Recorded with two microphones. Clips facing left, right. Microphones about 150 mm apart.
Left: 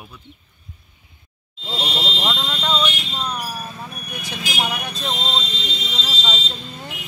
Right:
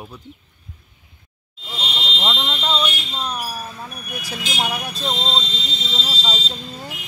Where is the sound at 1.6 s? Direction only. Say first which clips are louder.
Left 4 dB; 25° left (ahead or behind).